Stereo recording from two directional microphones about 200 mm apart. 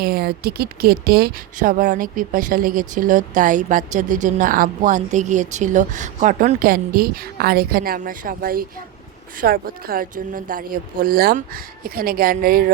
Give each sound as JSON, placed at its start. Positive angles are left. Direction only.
{"t": 0.0, "sound": "speech", "side_deg": -50}